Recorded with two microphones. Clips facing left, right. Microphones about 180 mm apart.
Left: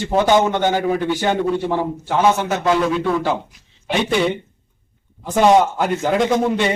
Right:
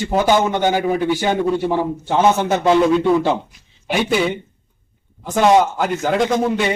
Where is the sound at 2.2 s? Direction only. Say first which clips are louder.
Right 1 dB; 25° right (ahead or behind).